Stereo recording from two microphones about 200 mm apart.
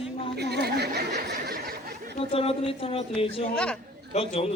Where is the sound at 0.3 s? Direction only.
55° right (ahead or behind).